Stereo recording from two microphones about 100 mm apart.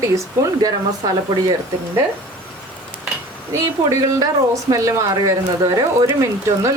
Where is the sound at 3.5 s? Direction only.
35° right (ahead or behind).